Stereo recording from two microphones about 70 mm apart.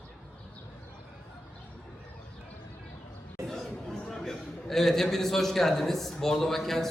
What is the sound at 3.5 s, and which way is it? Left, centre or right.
A man's voice, centre.